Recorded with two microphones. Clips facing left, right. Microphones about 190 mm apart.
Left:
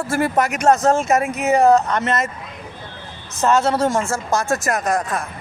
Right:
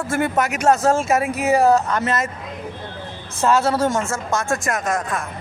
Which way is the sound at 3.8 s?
25° left (ahead or behind).